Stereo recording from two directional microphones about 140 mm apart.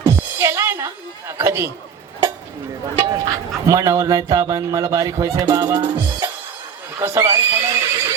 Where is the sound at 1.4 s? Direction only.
20° right (ahead or behind).